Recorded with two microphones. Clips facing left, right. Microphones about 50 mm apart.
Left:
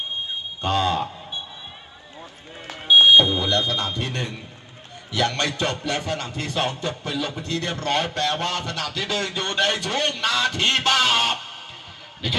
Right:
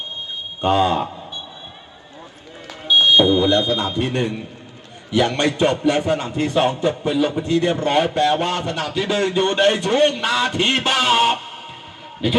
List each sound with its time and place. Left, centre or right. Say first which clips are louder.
0.6 s a man's voice: right 5 dB; right
2.8 s fire alarm: even; left
3.7 s a man's voice: right 6 dB; right